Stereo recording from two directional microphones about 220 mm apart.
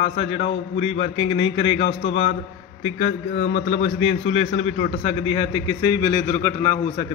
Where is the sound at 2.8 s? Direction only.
30° left (ahead or behind); by 7.0 s 15° left (ahead or behind).